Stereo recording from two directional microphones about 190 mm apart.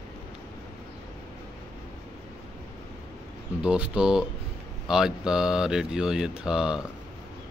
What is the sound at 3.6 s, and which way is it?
Speech, 5° right (ahead or behind).